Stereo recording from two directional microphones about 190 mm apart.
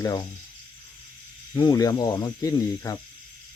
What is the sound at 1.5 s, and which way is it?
Speech, 20° left (ahead or behind).